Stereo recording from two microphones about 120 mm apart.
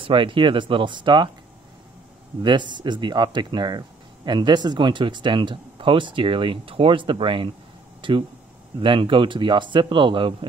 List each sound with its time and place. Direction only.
0.0 s speech: 45° right (ahead or behind)
2.4 s speech: 40° right (ahead or behind)